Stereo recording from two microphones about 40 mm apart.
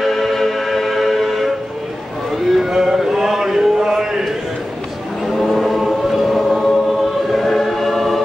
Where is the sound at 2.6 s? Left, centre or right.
Centre.